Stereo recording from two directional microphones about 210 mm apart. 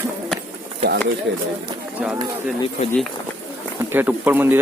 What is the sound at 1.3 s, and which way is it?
Speech, 55° right (ahead or behind).